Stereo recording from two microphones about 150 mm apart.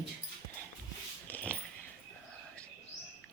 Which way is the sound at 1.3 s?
10° left (ahead or behind).